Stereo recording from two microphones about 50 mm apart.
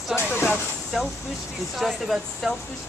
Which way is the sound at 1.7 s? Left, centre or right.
Centre.